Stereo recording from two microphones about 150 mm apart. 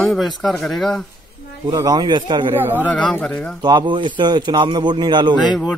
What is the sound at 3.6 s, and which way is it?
A man's voice, 30° right (ahead or behind).